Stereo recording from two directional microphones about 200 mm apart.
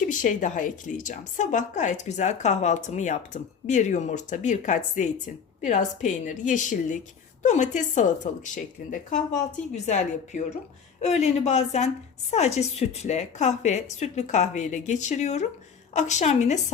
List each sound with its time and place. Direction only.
0.1 s a woman's voice: 40° left (ahead or behind)